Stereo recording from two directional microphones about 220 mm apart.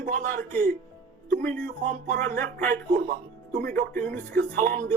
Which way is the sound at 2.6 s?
40° right (ahead or behind).